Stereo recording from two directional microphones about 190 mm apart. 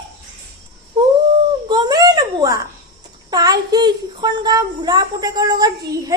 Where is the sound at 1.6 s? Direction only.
20° right (ahead or behind).